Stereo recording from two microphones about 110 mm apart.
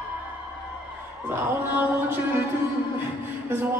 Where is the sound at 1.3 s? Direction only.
15° right (ahead or behind).